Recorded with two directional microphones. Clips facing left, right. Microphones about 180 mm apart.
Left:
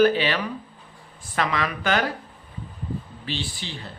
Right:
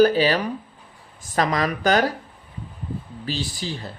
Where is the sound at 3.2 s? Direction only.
40° right (ahead or behind).